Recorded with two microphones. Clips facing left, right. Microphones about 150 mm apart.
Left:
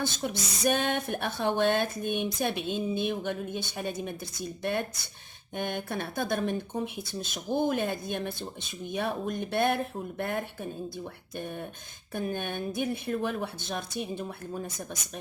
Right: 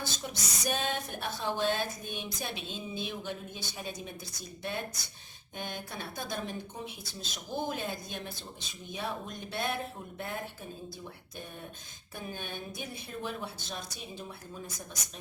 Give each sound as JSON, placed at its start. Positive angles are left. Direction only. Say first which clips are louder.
{"t": 0.0, "sound": "speech", "louder": "left 7 dB", "side_deg": 60}